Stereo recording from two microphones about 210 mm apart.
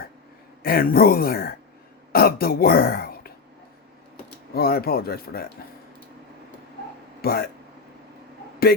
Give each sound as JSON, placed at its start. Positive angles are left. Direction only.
{"t": 0.6, "sound": "speech", "side_deg": 45}
{"t": 4.5, "sound": "speech", "side_deg": 45}
{"t": 7.2, "sound": "speech", "side_deg": 45}